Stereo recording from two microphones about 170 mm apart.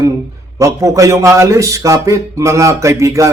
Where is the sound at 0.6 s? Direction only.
20° right (ahead or behind).